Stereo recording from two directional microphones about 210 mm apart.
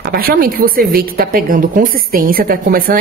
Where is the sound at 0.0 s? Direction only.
45° right (ahead or behind).